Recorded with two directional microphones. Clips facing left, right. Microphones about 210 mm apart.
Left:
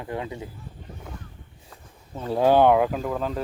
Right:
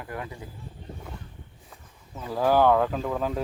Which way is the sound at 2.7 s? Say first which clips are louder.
Left 2 dB; 10° left (ahead or behind).